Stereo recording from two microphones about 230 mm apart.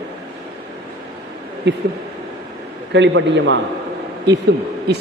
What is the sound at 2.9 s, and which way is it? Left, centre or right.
Speech, right.